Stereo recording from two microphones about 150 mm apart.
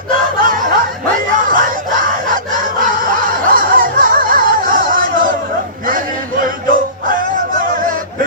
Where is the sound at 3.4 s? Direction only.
70° right (ahead or behind).